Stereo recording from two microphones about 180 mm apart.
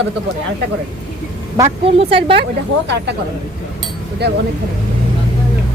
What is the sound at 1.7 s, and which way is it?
Speech, 35° right (ahead or behind).